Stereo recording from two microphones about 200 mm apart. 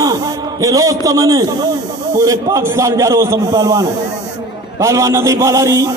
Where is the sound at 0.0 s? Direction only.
20° right (ahead or behind).